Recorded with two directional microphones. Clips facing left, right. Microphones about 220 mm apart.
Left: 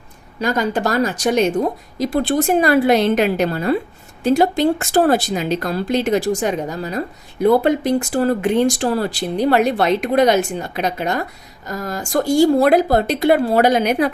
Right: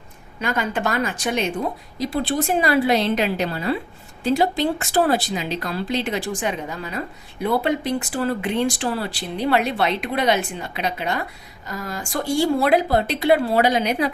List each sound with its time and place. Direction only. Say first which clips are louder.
0.3 s speech: left 5 dB; 40° left (ahead or behind)